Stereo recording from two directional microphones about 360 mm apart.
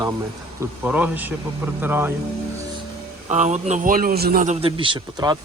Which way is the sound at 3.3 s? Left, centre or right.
Centre.